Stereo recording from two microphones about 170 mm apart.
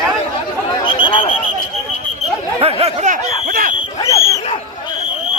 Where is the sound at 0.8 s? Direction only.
30° left (ahead or behind).